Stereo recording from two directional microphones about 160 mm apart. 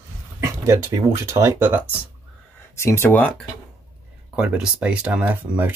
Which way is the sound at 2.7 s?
15° left (ahead or behind).